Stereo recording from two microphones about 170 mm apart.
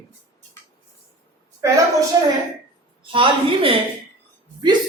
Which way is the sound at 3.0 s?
30° right (ahead or behind).